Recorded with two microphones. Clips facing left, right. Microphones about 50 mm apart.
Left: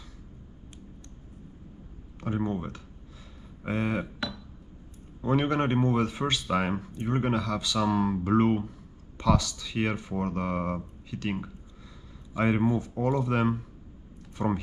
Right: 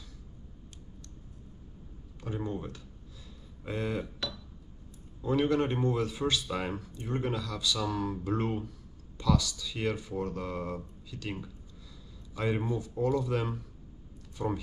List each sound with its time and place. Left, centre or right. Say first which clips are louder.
2.2 s a man's voice: left 5 dB; left